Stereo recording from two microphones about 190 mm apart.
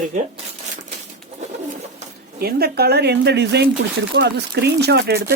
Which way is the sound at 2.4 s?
55° right (ahead or behind).